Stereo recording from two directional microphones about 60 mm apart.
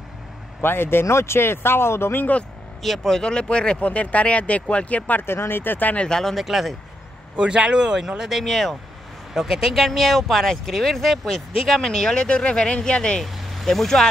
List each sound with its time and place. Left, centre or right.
0.6 s speech: left
2.8 s speech: centre; by 5.2 s left
5.2 s speech: left
6.0 s speech: centre
6.3 s speech: centre
7.3 s speech: centre
13.2 s speech: centre